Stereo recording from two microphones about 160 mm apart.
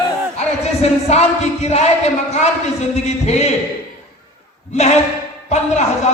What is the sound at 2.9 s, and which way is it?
Speech, 45° left (ahead or behind).